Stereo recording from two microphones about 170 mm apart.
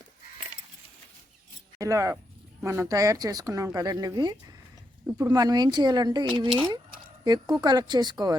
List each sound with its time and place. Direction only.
1.8 s speech: 20° right (ahead or behind)